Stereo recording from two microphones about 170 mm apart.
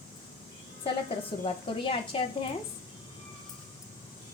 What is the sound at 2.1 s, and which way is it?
Speech, 30° left (ahead or behind).